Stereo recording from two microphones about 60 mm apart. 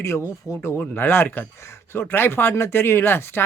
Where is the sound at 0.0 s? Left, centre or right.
Left.